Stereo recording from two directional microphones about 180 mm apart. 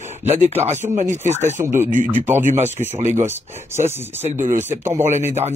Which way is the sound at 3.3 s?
15° right (ahead or behind).